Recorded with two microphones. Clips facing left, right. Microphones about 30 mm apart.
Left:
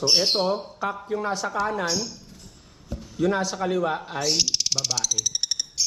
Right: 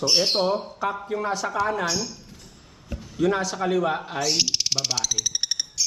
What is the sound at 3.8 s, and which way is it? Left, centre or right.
Speech, right.